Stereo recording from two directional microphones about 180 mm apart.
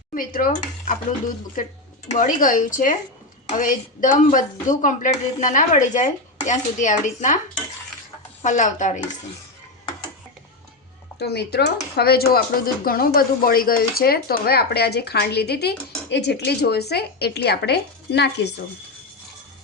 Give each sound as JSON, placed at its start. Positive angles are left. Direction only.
{"t": 0.1, "sound": "speech", "side_deg": 50}
{"t": 2.0, "sound": "speech", "side_deg": 45}
{"t": 8.4, "sound": "speech", "side_deg": 45}
{"t": 11.2, "sound": "speech", "side_deg": 65}